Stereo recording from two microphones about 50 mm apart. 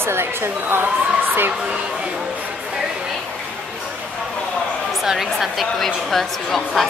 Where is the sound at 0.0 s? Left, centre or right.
Right.